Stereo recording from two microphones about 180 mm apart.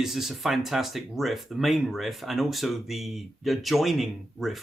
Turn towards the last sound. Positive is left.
turn(degrees=0)  # may be behind; listen again after turning